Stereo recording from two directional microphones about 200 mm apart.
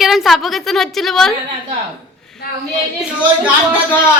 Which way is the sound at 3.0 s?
5° right (ahead or behind).